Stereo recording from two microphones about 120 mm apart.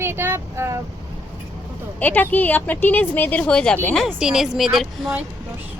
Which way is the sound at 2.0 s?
15° left (ahead or behind).